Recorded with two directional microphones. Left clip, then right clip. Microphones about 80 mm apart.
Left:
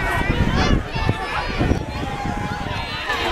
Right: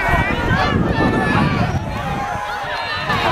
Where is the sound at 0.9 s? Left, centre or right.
Centre.